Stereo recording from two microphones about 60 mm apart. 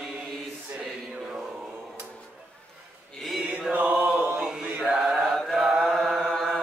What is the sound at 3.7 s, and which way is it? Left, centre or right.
Chant, right.